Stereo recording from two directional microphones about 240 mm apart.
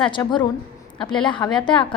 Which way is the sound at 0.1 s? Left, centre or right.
Centre.